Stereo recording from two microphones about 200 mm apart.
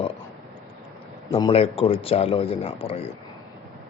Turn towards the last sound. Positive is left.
turn(degrees=30)  # may be behind; listen again after turning